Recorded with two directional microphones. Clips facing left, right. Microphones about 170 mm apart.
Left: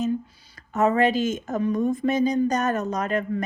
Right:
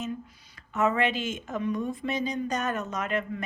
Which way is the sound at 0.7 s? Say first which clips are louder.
Left 5 dB; 40° left (ahead or behind).